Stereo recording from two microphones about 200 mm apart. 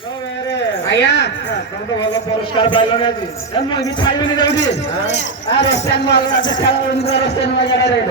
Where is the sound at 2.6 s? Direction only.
25° left (ahead or behind).